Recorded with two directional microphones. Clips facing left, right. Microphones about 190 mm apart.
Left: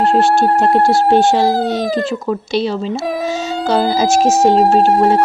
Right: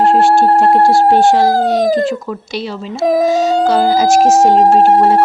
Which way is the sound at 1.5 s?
45° right (ahead or behind).